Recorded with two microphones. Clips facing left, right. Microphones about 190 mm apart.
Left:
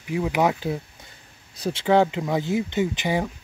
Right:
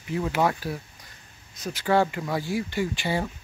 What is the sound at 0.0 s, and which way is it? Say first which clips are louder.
Speech: left 3 dB; 10° left (ahead or behind).